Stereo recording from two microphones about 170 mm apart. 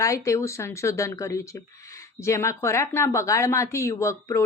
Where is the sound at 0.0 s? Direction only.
20° left (ahead or behind).